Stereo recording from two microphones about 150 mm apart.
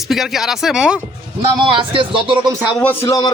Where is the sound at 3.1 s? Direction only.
25° left (ahead or behind).